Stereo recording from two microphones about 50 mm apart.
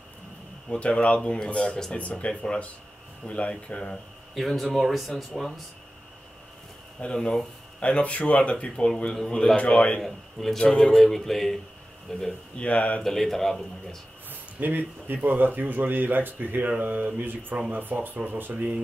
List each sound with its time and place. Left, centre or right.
0.7 s speech: left
4.4 s speech: centre
7.0 s a man's voice: centre
10.0 s a man's voice: centre
12.5 s speech: left
13.0 s speech: centre
14.3 s speech: right